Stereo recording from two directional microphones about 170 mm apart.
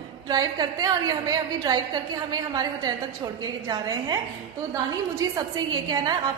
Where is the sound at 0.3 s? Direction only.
25° right (ahead or behind).